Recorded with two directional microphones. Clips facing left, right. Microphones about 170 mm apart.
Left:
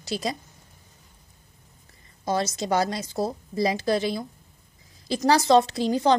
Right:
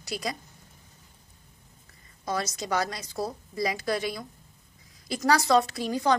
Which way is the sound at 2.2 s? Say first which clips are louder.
Left 5 dB; 25° left (ahead or behind).